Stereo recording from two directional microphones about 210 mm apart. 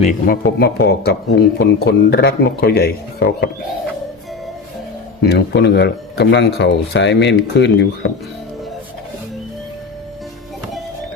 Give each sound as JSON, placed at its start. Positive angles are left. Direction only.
{"t": 0.0, "sound": "speech", "side_deg": 40}
{"t": 5.2, "sound": "speech", "side_deg": 50}